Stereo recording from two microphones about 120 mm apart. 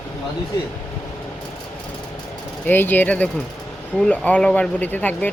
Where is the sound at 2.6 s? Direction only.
15° left (ahead or behind).